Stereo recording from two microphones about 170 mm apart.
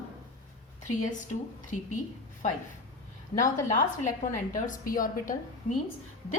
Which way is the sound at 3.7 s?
50° left (ahead or behind).